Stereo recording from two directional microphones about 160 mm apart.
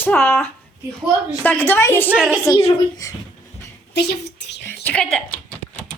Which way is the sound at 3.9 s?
90° left.